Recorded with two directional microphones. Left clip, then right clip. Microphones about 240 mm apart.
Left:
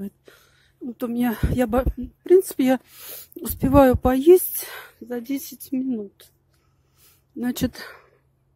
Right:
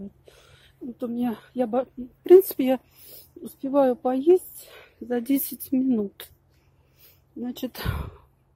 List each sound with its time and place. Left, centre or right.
0.2 s a sound: centre
0.9 s speech: left
2.2 s a woman's voice: centre
5.0 s speech: centre
7.3 s speech: left
7.7 s speech: centre